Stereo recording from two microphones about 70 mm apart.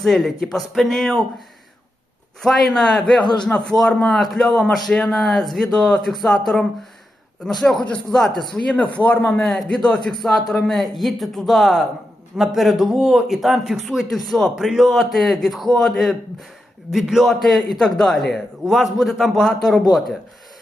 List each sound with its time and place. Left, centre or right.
0.0 s a man's voice: centre
2.4 s a man's voice: centre